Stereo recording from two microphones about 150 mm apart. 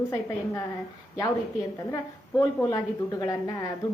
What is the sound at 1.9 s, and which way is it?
A woman's voice, 20° left (ahead or behind).